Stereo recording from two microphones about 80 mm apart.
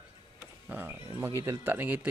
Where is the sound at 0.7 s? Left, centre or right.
Right.